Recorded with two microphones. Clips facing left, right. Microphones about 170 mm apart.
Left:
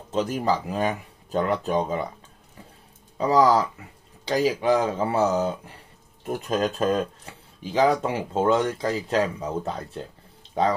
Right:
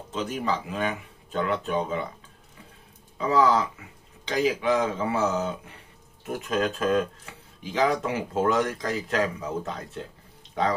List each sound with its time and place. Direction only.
0.1 s speech: 40° left (ahead or behind)
3.2 s speech: 35° left (ahead or behind)